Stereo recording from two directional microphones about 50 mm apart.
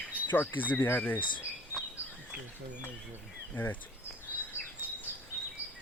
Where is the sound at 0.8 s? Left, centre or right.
Left.